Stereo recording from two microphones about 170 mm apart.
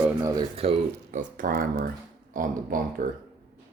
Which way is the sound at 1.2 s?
55° right (ahead or behind).